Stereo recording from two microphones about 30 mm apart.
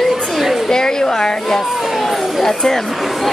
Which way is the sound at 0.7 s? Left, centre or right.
Left.